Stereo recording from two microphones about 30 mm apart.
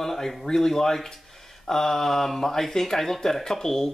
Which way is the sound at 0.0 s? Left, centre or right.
Centre.